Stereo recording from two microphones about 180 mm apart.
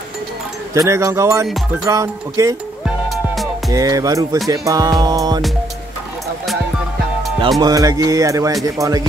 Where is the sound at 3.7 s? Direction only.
20° right (ahead or behind).